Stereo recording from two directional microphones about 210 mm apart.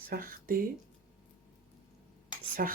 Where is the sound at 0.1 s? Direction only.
45° right (ahead or behind).